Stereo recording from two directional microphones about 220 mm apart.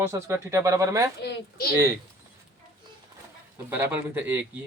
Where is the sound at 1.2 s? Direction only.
45° left (ahead or behind).